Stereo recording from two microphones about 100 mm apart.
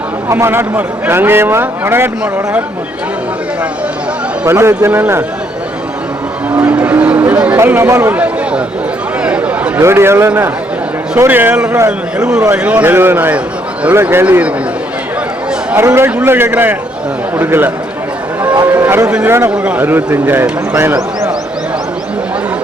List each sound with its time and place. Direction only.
0.3 s a man's voice: 25° right (ahead or behind)
4.4 s a man's voice: 25° right (ahead or behind)
6.6 s a sound: 15° right (ahead or behind)
7.5 s speech: 25° right (ahead or behind)
9.2 s a sound: 15° right (ahead or behind)
9.8 s a man's voice: 25° right (ahead or behind)
11.9 s a man's voice: 10° right (ahead or behind)
15.7 s a man's voice: 25° right (ahead or behind)
18.7 s a sound: 20° right (ahead or behind)
19.5 s a man's voice: 15° right (ahead or behind)